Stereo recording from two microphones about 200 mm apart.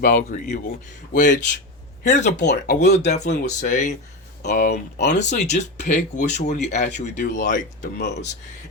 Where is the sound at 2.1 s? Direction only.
35° left (ahead or behind).